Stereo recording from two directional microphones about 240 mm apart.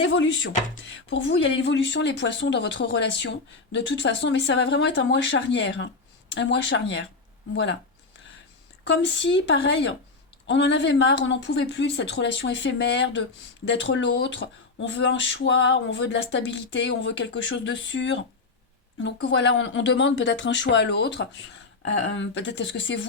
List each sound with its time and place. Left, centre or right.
0.0 s speech: left
8.9 s speech: left